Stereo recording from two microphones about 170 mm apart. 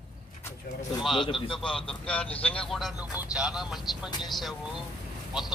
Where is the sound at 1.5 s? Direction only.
5° left (ahead or behind).